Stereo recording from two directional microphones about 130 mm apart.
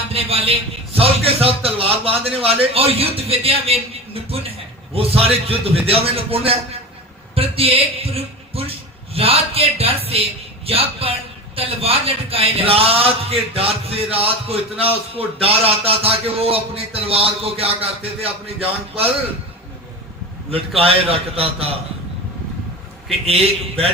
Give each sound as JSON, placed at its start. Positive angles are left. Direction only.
{"t": 0.1, "sound": "a man's voice", "side_deg": -45}
{"t": 20.5, "sound": "a man's voice", "side_deg": -50}
{"t": 23.2, "sound": "a man's voice", "side_deg": -50}